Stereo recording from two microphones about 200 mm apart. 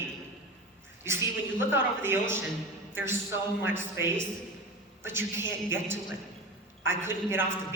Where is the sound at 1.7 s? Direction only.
10° right (ahead or behind).